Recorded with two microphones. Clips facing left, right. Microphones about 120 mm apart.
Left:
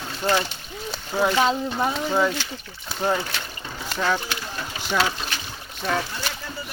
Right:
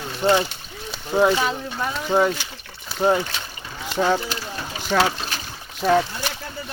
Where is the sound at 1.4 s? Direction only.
25° left (ahead or behind).